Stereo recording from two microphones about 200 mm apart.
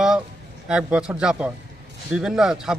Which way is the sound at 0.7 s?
5° right (ahead or behind).